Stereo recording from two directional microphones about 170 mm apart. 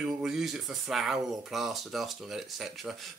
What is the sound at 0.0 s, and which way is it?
Speech, 5° right (ahead or behind).